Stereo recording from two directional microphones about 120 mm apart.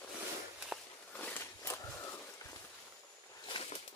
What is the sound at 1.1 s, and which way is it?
Walk, 15° left (ahead or behind).